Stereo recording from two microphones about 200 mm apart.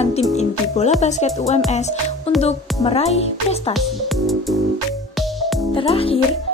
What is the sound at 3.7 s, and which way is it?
Music, centre (ahead or behind).